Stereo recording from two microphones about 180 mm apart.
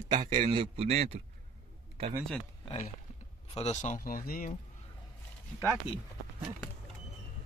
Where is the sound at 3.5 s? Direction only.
40° left (ahead or behind).